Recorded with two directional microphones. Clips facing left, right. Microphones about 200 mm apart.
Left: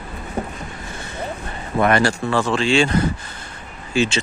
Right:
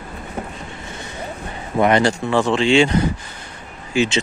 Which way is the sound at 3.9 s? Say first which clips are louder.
Right 1 dB; 15° right (ahead or behind).